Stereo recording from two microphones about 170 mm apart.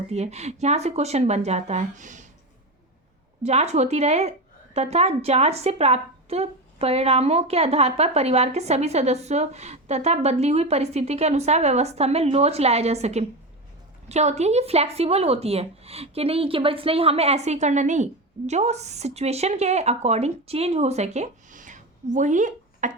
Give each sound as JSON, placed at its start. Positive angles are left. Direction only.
{"t": 0.1, "sound": "a woman's voice", "side_deg": -40}
{"t": 3.4, "sound": "a woman's voice", "side_deg": -40}